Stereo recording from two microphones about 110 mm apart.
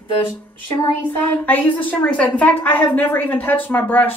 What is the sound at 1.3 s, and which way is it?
A woman's voice, 15° left (ahead or behind).